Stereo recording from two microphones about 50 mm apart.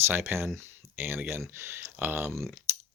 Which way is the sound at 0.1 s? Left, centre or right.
Right.